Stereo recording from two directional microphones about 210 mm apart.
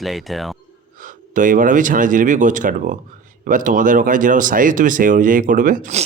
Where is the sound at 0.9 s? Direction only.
40° right (ahead or behind).